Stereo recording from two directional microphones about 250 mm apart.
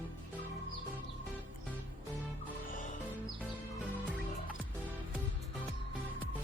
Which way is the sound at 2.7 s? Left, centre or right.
Left.